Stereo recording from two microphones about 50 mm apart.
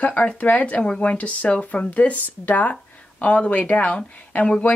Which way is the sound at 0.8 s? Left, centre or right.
Left.